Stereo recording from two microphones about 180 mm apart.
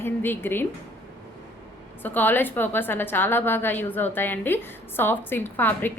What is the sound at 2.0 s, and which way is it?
A woman's voice, 10° left (ahead or behind).